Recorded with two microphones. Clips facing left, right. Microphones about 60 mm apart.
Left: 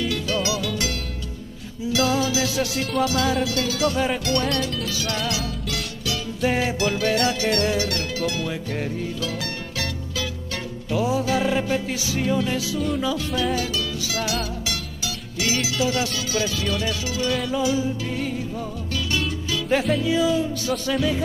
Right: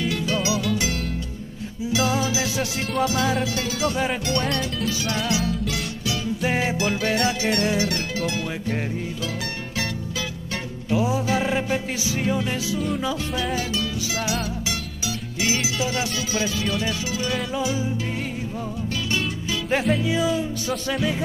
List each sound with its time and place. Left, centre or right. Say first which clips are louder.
0.0 s music: even; right
10.9 s music: even; right